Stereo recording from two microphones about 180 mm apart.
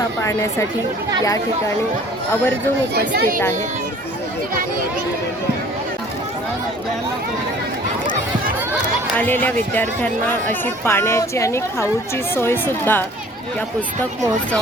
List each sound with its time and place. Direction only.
2.3 s speech: 10° left (ahead or behind)
2.9 s speech: 65° right (ahead or behind)
9.1 s speech: 10° left (ahead or behind)